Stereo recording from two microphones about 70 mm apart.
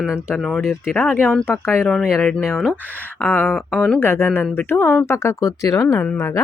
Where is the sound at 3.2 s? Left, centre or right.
Left.